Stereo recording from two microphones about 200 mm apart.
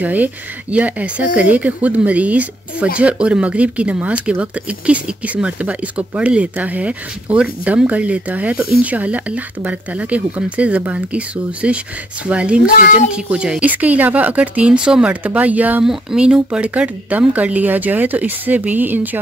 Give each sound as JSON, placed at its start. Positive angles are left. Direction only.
{"t": 0.0, "sound": "speech", "side_deg": -10}
{"t": 12.6, "sound": "a child's voice", "side_deg": 45}
{"t": 13.1, "sound": "speech", "side_deg": -5}